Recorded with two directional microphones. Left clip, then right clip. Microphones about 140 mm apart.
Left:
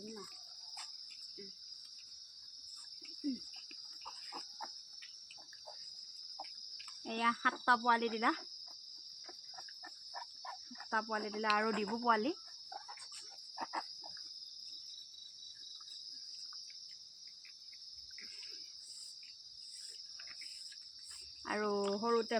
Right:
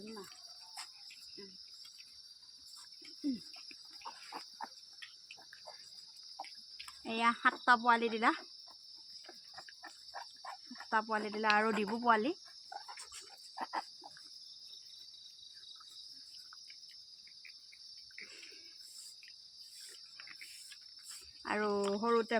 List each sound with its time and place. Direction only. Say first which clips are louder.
0.0 s cricket: even; 25° right (ahead or behind)
4.0 s cricket: right 2 dB; 25° right (ahead or behind)
6.3 s a sound: right 1 dB; 25° right (ahead or behind)
10.2 s cricket: even; 20° right (ahead or behind)
21.4 s cricket: right 2 dB; 30° right (ahead or behind)
21.8 s cricket: right 1 dB; 40° right (ahead or behind)